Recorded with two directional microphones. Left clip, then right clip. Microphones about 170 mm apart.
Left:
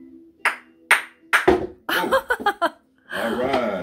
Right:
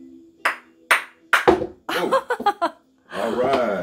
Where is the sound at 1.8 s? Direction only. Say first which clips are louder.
Left 1 dB; 10° left (ahead or behind).